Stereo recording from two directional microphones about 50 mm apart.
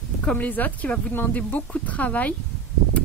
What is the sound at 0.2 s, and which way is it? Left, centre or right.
Speech, left.